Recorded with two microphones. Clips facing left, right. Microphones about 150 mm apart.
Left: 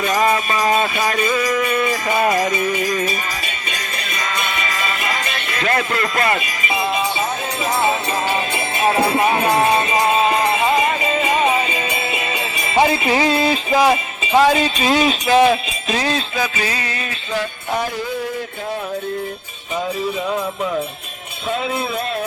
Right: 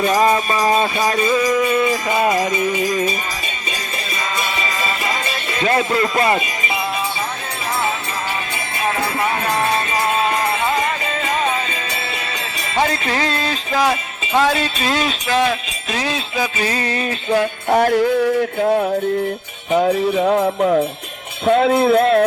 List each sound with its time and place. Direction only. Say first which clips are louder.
0.2 s jingle bell: right 2 dB; 25° right (ahead or behind)
4.6 s music: right 1 dB; 25° right (ahead or behind)
8.8 s music: left 4 dB; 25° left (ahead or behind); by 16.5 s 5° right (ahead or behind)
16.6 s music: right 2 dB; 40° right (ahead or behind)
17.3 s music: right 6 dB; 60° right (ahead or behind)
19.7 s speech: right 7 dB; 75° right (ahead or behind)
21.4 s speech: right 9 dB; 65° right (ahead or behind)